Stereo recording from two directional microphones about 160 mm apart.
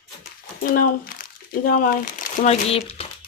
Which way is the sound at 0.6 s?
60° left (ahead or behind).